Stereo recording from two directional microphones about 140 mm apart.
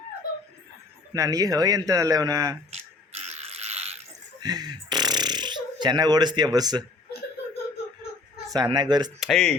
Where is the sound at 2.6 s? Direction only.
45° right (ahead or behind).